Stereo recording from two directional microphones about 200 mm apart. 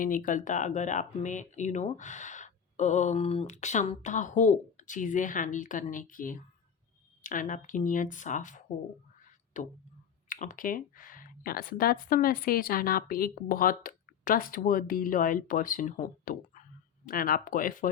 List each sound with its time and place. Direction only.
0.0 s speech: 40° left (ahead or behind)